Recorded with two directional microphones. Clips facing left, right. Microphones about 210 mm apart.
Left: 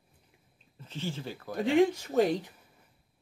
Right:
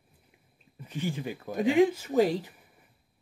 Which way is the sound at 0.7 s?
15° right (ahead or behind).